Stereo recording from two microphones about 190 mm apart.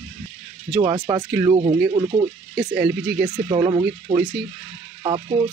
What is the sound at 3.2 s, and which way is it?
Speech, 20° right (ahead or behind).